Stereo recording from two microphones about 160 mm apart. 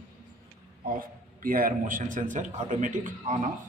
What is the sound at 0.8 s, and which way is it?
A man's voice, 65° right (ahead or behind).